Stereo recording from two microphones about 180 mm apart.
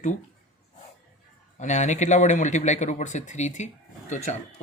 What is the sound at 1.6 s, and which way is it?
Speech, 40° left (ahead or behind).